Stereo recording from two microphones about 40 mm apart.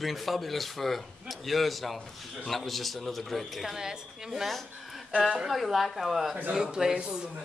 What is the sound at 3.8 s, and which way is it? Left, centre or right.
Speech, centre.